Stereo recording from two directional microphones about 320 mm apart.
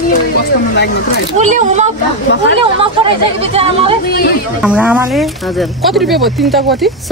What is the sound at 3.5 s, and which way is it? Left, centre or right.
Speech, centre.